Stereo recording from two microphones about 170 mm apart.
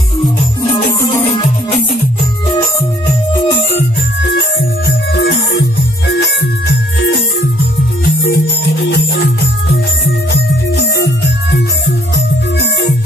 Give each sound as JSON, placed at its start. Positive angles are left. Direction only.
{"t": 4.2, "sound": "music", "side_deg": 90}